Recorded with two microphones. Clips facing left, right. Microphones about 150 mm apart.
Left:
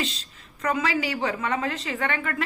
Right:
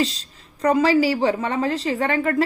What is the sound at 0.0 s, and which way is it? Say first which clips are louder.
A woman's voice: right 8 dB; 35° right (ahead or behind).